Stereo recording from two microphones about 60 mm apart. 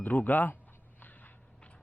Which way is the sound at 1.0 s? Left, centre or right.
Left.